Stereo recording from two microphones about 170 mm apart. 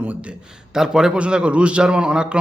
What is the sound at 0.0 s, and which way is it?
A man's voice, 10° right (ahead or behind).